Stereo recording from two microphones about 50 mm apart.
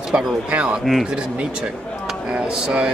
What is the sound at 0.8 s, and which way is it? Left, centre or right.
Speech, centre.